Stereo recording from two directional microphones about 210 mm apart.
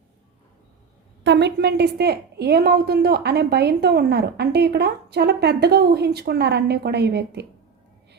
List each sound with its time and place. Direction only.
1.2 s a woman's voice: 55° right (ahead or behind)